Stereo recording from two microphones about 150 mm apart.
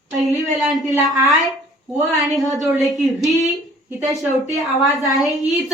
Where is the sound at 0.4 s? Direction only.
Centre (ahead or behind).